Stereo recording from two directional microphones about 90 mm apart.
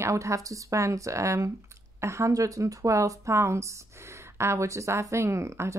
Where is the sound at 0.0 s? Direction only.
35° right (ahead or behind).